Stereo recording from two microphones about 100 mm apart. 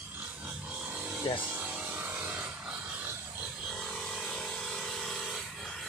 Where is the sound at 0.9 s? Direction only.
15° right (ahead or behind).